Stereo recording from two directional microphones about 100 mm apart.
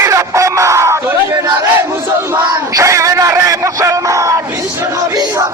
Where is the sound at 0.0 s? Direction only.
30° right (ahead or behind).